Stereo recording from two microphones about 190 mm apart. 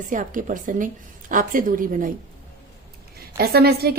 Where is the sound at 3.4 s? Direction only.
55° right (ahead or behind).